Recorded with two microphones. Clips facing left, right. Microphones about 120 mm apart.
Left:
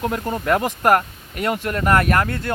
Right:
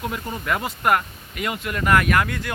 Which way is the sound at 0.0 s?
45° left (ahead or behind).